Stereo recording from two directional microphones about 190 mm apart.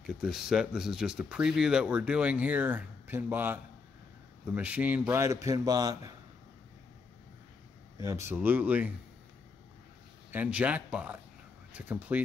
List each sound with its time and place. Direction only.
0.0 s a man's voice: 5° right (ahead or behind); by 6.1 s 20° right (ahead or behind)
8.0 s a man's voice: 15° right (ahead or behind)
10.3 s a man's voice: 10° right (ahead or behind)